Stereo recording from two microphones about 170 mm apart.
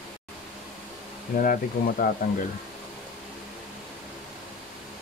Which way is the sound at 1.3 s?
55° left (ahead or behind).